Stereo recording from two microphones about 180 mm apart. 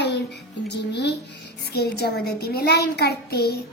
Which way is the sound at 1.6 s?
65° left (ahead or behind).